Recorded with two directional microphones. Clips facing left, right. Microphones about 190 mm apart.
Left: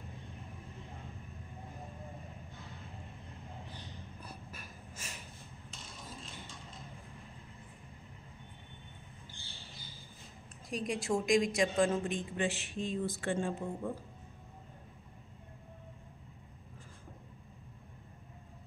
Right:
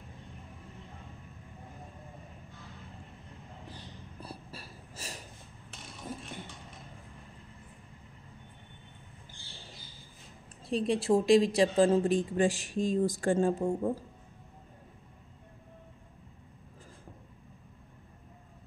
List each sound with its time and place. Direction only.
4.2 s wheeze: 30° right (ahead or behind)
5.7 s a sound: 65° right (ahead or behind)
10.7 s a woman's voice: 30° right (ahead or behind)